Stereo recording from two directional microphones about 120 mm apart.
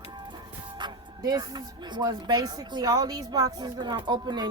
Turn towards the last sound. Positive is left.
turn(degrees=-35)  # may be behind; listen again after turning